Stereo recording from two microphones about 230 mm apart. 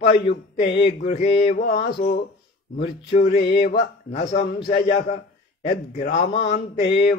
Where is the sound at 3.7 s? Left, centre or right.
Left.